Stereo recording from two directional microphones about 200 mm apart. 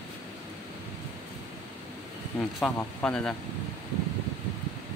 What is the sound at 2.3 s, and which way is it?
Speech, 5° left (ahead or behind).